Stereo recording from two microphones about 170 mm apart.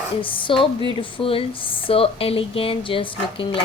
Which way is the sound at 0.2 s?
30° left (ahead or behind).